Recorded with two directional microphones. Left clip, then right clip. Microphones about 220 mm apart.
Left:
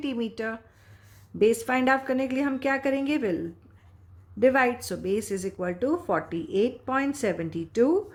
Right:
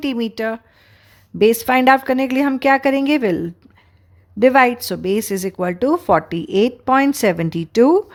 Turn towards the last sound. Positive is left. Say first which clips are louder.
# right 10 dB
turn(degrees=-45)  # may be behind; listen again after turning